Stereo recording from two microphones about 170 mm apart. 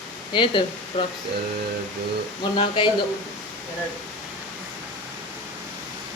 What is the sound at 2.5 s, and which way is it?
Speech, 30° left (ahead or behind).